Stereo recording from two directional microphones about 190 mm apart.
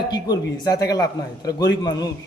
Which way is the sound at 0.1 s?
20° left (ahead or behind).